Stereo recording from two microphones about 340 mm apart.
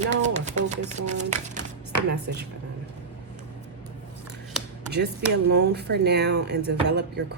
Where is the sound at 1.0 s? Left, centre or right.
Right.